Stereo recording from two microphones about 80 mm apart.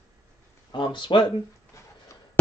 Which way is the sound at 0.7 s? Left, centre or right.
Left.